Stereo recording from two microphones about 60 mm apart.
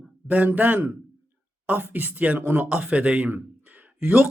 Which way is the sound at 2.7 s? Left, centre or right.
Right.